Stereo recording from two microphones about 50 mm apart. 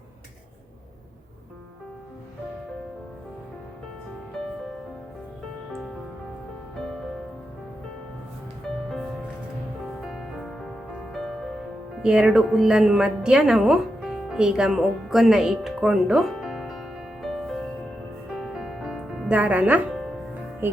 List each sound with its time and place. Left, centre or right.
10.1 s music: centre
12.0 s a woman's voice: centre
14.3 s speech: centre
16.3 s music: centre
17.2 s music: centre
18.5 s music: centre
19.3 s speech: right